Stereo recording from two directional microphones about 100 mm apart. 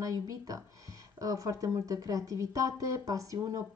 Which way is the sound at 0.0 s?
35° right (ahead or behind).